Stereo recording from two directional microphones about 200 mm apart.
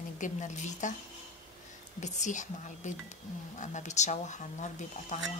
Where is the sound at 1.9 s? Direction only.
35° left (ahead or behind).